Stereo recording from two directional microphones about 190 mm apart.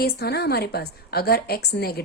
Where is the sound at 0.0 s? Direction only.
60° left (ahead or behind).